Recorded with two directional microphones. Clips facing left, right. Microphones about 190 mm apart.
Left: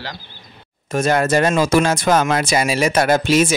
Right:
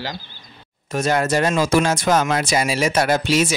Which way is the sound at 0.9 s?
55° left (ahead or behind).